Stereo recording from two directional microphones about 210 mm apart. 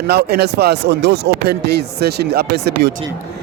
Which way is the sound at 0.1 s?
50° right (ahead or behind).